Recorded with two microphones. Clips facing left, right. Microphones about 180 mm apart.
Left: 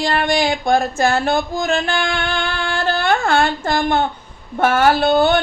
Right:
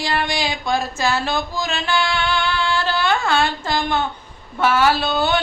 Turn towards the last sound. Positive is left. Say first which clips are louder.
# left 5 dB
turn(degrees=50)  # may be behind; listen again after turning